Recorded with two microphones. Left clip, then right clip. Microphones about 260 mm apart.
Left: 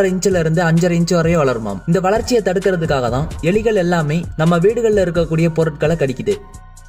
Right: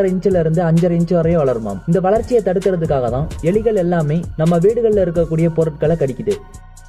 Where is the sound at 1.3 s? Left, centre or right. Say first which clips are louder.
Even; left.